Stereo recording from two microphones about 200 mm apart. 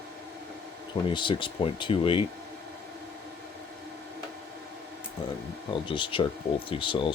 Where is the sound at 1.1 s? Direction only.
25° left (ahead or behind).